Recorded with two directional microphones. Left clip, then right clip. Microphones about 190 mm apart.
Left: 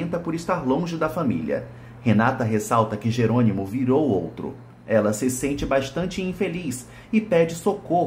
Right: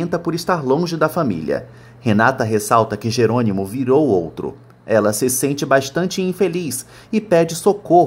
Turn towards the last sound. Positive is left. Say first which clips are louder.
# right 9 dB
turn(degrees=-40)  # may be behind; listen again after turning